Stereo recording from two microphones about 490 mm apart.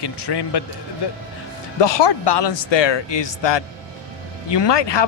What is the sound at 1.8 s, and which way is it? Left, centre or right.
Speech, left.